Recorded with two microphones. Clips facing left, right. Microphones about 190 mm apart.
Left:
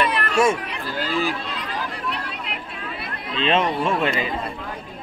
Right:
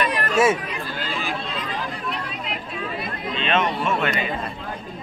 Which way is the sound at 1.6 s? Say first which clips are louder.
Even; 65° left (ahead or behind).